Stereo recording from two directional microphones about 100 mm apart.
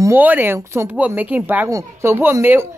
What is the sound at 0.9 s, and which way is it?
Speech, 15° right (ahead or behind).